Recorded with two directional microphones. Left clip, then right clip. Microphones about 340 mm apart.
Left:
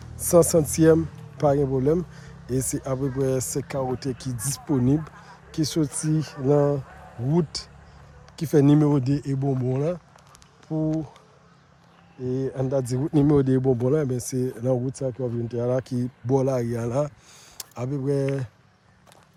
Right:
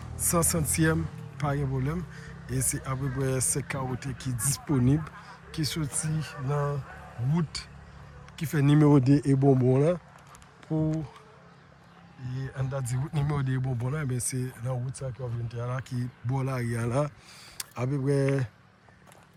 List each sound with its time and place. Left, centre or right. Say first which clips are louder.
0.2 s speech: left 11 dB; centre
12.2 s speech: left 13 dB; centre